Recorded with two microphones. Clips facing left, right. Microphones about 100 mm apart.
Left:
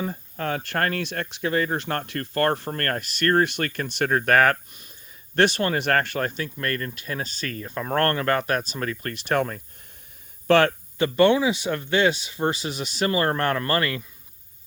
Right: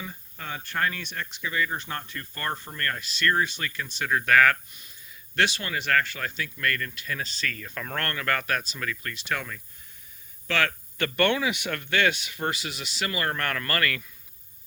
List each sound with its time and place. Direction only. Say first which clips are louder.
0.3 s speech: left 5 dB; 65° left (ahead or behind)
1.8 s speech: left 7 dB; 70° left (ahead or behind); by 10.7 s 45° left (ahead or behind)
11.0 s speech: left 6 dB; 15° left (ahead or behind)